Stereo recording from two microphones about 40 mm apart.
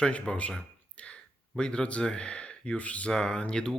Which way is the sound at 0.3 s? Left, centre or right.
Left.